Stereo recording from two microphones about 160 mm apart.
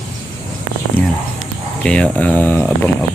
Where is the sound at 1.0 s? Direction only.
15° left (ahead or behind).